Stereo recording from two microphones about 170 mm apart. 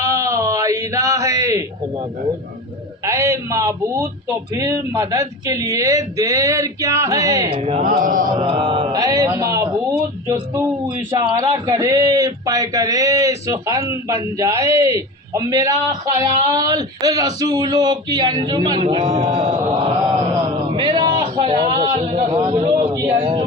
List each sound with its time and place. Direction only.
0.0 s a sound: 20° right (ahead or behind)
3.0 s a man's voice: 15° right (ahead or behind)
7.5 s speech: 40° right (ahead or behind)
7.8 s mantra: 55° right (ahead or behind)
8.4 s speech: 30° right (ahead or behind)
20.7 s a sound: 25° right (ahead or behind)